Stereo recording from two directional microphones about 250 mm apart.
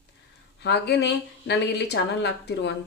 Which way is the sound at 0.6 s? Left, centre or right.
Left.